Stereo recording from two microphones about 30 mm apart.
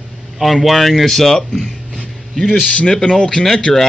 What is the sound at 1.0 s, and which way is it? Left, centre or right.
Speech, centre.